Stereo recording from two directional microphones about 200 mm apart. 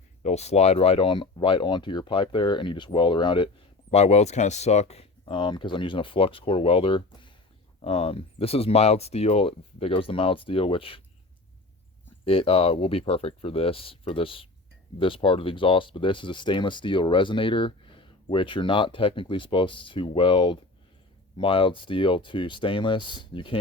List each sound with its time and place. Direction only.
0.2 s speech: 35° left (ahead or behind)
12.2 s speech: 30° left (ahead or behind)